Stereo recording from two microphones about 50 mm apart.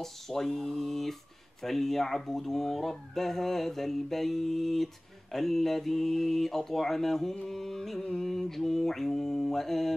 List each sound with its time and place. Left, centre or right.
0.0 s speech: centre